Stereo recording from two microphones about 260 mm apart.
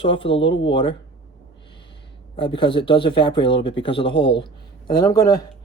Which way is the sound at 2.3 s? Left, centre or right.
Centre.